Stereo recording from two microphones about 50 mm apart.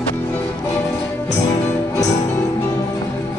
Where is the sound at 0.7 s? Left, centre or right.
Left.